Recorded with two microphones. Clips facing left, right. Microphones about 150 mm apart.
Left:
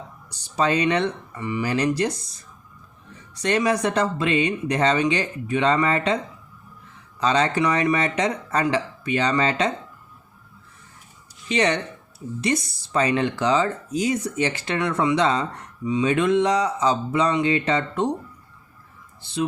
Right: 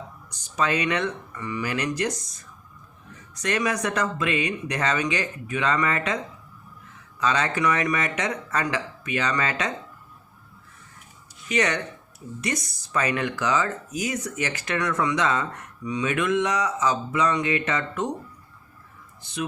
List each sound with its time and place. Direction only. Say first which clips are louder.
0.3 s speech: left 3 dB; 35° left (ahead or behind)
3.3 s speech: left 4 dB; 30° left (ahead or behind)
7.2 s speech: left 4 dB; 30° left (ahead or behind)
11.4 s speech: left 3 dB; 30° left (ahead or behind)
19.2 s speech: left 5 dB; 30° left (ahead or behind)